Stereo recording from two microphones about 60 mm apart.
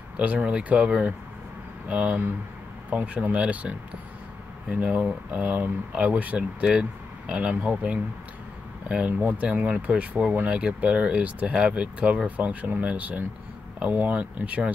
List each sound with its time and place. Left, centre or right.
0.2 s speech: right